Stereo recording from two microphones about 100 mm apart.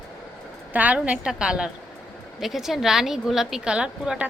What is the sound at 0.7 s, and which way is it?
A woman's voice, 15° right (ahead or behind).